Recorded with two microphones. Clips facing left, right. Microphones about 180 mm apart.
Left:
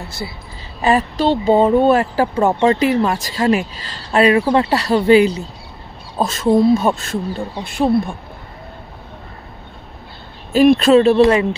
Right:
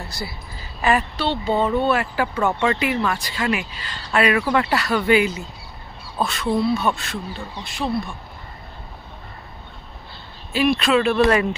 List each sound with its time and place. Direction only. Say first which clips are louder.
0.2 s a woman's voice: left 4 dB; 20° left (ahead or behind)
0.8 s speech: left 6 dB; 40° left (ahead or behind)
10.5 s speech: left 8 dB; 45° left (ahead or behind); by 11.4 s 25° left (ahead or behind)